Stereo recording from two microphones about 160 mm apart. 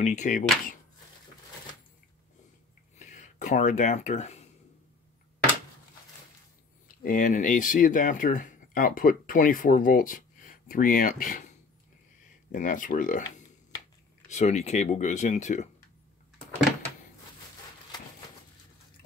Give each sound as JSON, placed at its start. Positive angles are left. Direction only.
{"t": 0.0, "sound": "speech", "side_deg": 50}
{"t": 3.0, "sound": "speech", "side_deg": 50}
{"t": 7.0, "sound": "speech", "side_deg": 60}
{"t": 12.4, "sound": "speech", "side_deg": 55}
{"t": 14.3, "sound": "speech", "side_deg": 45}